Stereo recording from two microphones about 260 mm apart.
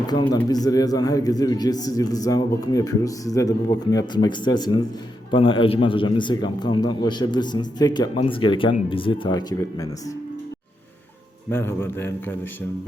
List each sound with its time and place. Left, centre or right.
0.1 s a man's voice: centre
11.5 s a man's voice: centre